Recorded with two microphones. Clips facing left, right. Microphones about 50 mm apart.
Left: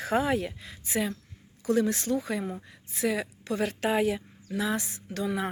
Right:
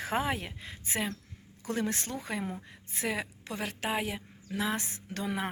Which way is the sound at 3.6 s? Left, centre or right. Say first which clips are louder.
Left 6 dB; centre.